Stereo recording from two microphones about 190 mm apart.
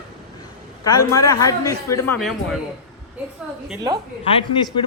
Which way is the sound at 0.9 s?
15° left (ahead or behind).